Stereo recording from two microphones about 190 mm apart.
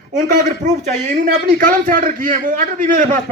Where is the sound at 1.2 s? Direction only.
45° right (ahead or behind).